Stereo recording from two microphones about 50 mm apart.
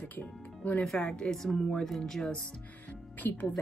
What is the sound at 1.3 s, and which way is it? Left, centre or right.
Speech, centre.